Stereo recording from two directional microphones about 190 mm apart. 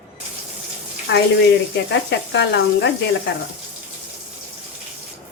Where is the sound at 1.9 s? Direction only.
65° left (ahead or behind).